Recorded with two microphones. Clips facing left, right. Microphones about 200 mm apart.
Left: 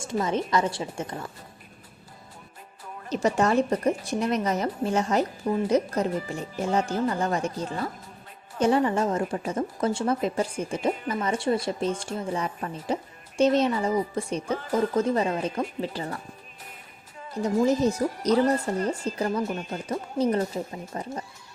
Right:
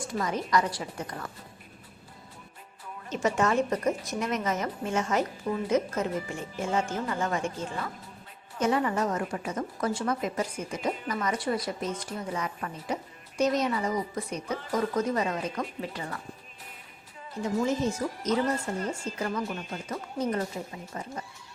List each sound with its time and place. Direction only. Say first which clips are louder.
0.0 s a woman's voice: left 4 dB; 25° left (ahead or behind)
3.1 s a woman's voice: left 3 dB; 35° left (ahead or behind)
17.3 s speech: left 5 dB; 40° left (ahead or behind)
19.9 s speech: left 6 dB; 30° left (ahead or behind)